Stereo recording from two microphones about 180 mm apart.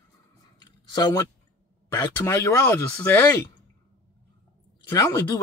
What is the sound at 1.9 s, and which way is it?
Speech, 15° left (ahead or behind).